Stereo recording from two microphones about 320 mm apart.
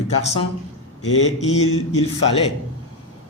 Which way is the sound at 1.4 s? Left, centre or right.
Centre.